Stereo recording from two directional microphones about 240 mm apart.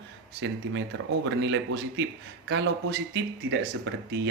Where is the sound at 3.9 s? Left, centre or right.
Right.